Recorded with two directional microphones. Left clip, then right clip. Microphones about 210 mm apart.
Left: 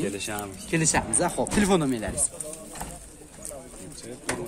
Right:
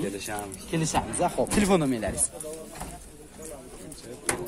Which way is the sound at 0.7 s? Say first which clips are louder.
Left 3 dB; 10° left (ahead or behind).